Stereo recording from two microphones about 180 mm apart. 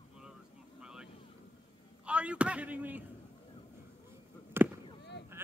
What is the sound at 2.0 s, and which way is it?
Speech, 5° right (ahead or behind).